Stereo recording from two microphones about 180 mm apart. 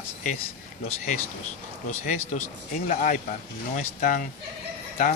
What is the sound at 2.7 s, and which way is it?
Speech, 45° left (ahead or behind).